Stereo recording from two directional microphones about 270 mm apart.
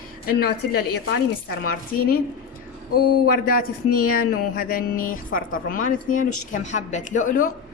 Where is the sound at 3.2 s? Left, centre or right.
Left.